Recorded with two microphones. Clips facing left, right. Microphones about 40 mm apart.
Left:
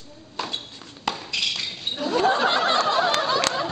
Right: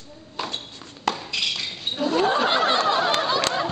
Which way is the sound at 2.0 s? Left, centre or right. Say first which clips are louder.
Right 2 dB; centre.